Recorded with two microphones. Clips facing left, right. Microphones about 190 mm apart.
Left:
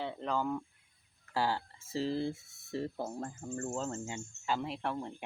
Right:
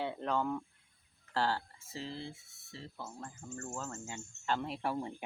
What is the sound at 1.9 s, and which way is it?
Speech, 35° left (ahead or behind).